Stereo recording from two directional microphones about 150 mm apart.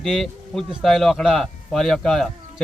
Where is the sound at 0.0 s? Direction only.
Centre (ahead or behind).